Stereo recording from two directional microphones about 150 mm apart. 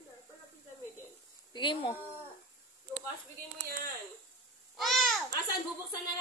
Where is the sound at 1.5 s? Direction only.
35° left (ahead or behind).